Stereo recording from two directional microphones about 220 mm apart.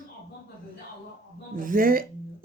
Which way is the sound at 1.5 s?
40° right (ahead or behind).